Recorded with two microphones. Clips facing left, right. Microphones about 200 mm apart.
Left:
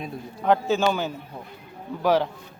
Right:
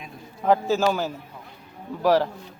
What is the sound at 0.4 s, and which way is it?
A man's voice, centre (ahead or behind).